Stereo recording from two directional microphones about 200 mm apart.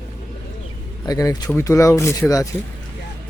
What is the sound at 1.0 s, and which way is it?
Speech, 20° left (ahead or behind).